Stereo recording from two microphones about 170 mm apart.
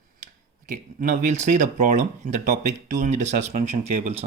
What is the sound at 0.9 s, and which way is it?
Speech, 45° right (ahead or behind).